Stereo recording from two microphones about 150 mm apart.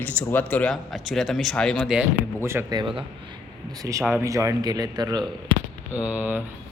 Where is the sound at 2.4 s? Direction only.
15° right (ahead or behind).